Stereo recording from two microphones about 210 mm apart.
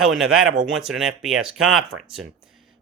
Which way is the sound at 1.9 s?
65° right (ahead or behind).